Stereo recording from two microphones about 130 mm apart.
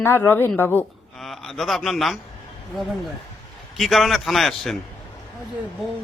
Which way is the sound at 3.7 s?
Centre (ahead or behind).